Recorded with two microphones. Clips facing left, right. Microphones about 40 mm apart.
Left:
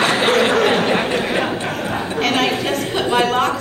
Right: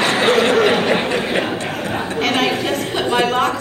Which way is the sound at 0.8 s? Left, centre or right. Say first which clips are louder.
Even; centre.